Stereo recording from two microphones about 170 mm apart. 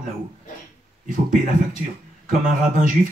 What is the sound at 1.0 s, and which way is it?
Speech, 50° right (ahead or behind).